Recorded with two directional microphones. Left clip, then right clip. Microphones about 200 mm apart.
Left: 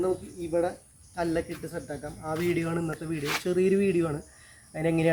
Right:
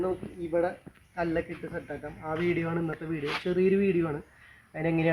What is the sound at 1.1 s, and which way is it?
Speech, 10° left (ahead or behind).